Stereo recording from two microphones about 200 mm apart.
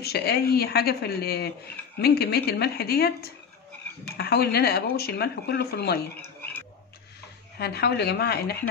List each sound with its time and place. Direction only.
0.0 s speech: 55° left (ahead or behind)
6.2 s frog: 10° left (ahead or behind)
7.5 s speech: 55° left (ahead or behind)